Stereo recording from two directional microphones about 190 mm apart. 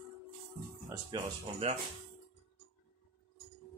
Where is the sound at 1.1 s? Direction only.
25° right (ahead or behind).